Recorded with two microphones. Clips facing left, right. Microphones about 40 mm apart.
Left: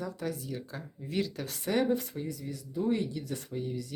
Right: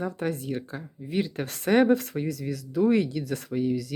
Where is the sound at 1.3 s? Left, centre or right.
Right.